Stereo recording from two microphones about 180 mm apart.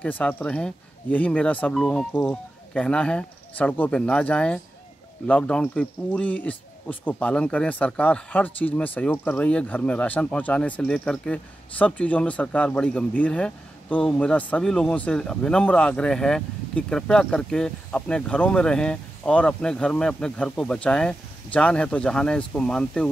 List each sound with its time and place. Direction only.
0.0 s speech: 10° left (ahead or behind)